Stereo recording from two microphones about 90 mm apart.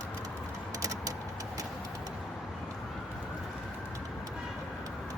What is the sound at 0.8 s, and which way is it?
Typing, 40° right (ahead or behind).